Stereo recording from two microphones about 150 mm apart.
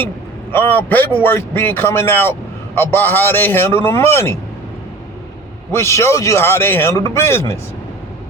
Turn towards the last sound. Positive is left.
turn(degrees=15)  # may be behind; listen again after turning